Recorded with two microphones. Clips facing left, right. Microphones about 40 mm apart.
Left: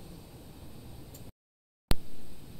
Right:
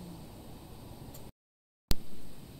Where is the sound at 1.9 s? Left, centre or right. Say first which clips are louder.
Left 4 dB; centre.